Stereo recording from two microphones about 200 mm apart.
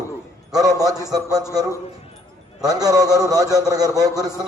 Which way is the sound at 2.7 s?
15° right (ahead or behind).